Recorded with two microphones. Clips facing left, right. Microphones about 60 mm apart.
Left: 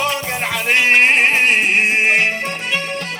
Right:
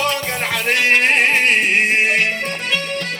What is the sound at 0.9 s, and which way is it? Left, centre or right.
Music, left.